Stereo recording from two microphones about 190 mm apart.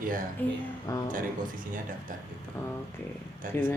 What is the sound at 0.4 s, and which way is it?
Speech, 10° left (ahead or behind).